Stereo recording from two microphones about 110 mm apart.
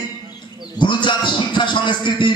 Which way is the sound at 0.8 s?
45° left (ahead or behind).